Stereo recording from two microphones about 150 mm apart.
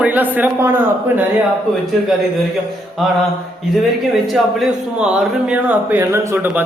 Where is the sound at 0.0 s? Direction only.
10° right (ahead or behind).